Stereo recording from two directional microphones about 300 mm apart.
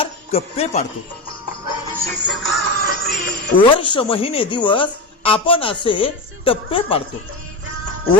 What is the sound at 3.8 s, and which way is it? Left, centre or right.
A woman's voice, centre.